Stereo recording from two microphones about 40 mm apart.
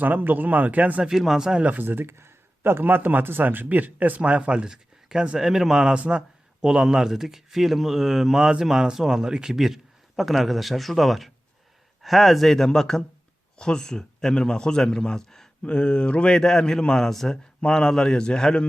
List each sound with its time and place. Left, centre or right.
0.0 s speech: right
1.8 s speech: right
4.2 s speech: right
4.7 s a sound: centre
5.4 s a man's voice: centre
15.6 s a man's voice: left; by 17.3 s centre
17.6 s a man's voice: left